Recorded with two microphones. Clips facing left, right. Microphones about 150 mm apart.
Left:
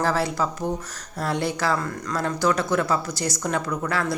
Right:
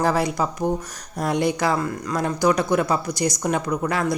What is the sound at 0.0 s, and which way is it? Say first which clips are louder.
A woman's voice: right 2 dB; 15° right (ahead or behind).